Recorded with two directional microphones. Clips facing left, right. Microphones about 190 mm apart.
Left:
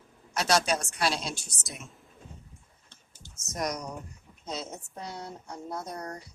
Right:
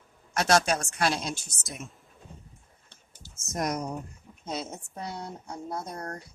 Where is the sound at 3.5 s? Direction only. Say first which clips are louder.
Right 3 dB; 50° right (ahead or behind).